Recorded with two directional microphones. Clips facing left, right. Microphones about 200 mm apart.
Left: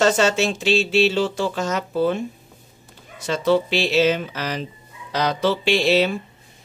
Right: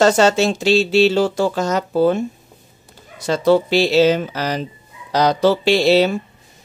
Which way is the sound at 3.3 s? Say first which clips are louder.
Right 4 dB; 40° right (ahead or behind).